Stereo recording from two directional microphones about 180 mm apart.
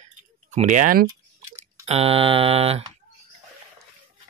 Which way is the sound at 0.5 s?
45° right (ahead or behind).